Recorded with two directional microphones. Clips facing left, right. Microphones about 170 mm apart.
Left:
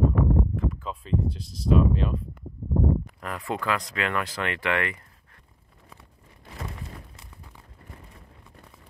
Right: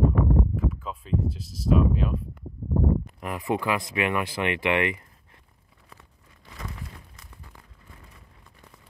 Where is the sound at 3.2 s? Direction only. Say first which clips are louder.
Right 4 dB; 15° right (ahead or behind).